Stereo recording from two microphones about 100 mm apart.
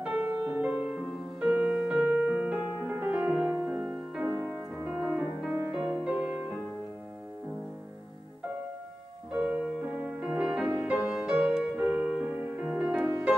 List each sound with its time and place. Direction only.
0.0 s music: 15° right (ahead or behind)
3.5 s music: 25° right (ahead or behind)
4.4 s music: 15° right (ahead or behind)
9.3 s music: 10° right (ahead or behind)
11.1 s music: 5° right (ahead or behind)